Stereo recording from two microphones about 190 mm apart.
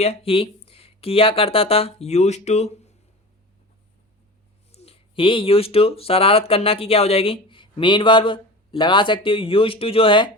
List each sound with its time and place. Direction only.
0.0 s speech: 30° left (ahead or behind)
4.7 s speech: 30° left (ahead or behind)